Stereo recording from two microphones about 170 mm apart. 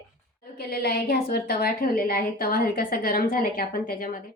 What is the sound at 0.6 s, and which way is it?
A woman's voice, 65° left (ahead or behind).